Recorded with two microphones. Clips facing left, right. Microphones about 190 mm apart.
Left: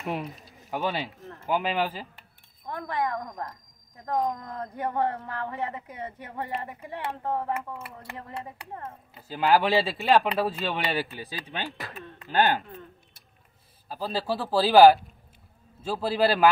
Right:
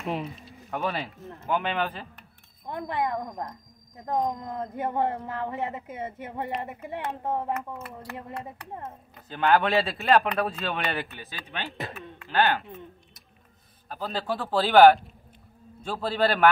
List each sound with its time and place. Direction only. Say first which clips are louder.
0.0 s speech: right 1 dB; centre (ahead or behind)
2.6 s speech: right 1 dB; 25° right (ahead or behind)
7.5 s speech: right 1 dB; 25° left (ahead or behind)
9.1 s speech: even; 10° left (ahead or behind)
12.4 s speech: left 1 dB; 15° left (ahead or behind)
13.8 s speech: left 1 dB; 5° left (ahead or behind)